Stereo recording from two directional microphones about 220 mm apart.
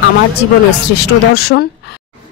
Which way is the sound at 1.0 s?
45° left (ahead or behind).